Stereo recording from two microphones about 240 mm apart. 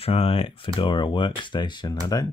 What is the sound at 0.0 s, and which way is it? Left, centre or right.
Speech, left.